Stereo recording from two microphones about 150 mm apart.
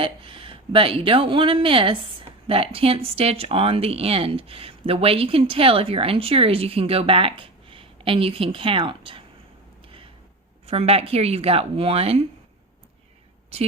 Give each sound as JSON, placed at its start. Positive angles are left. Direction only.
{"t": 0.0, "sound": "speech", "side_deg": -35}
{"t": 10.7, "sound": "speech", "side_deg": -45}
{"t": 13.5, "sound": "speech", "side_deg": -45}